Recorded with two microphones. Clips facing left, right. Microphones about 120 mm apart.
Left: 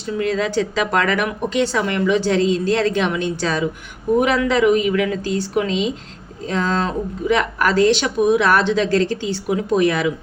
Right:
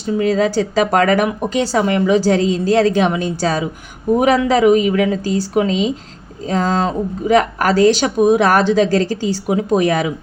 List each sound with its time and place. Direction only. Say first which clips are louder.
0.2 s speech: right 4 dB; 40° right (ahead or behind)